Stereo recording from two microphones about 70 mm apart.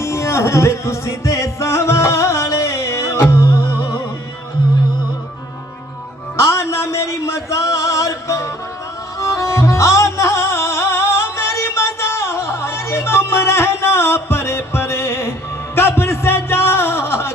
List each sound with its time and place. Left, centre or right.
0.0 s music: left
6.3 s a sound: left
9.2 s music: left